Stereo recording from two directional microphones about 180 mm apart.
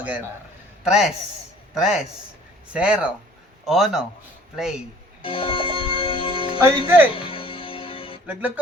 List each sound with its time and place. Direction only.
0.9 s a man's voice: 5° right (ahead or behind)
5.2 s speech: 30° left (ahead or behind)
6.8 s speech: 10° right (ahead or behind)
7.2 s music: 30° left (ahead or behind)
8.3 s speech: 10° right (ahead or behind)